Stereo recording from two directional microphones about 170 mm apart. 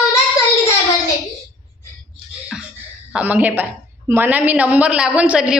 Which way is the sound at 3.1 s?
10° right (ahead or behind).